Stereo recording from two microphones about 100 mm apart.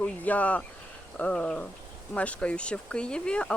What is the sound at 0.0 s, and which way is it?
Speech, 15° left (ahead or behind).